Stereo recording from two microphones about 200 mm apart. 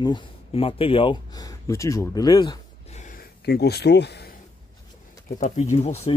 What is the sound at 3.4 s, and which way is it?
Speech, 55° left (ahead or behind).